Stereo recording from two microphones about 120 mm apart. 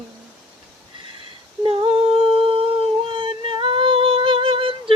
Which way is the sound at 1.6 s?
45° right (ahead or behind).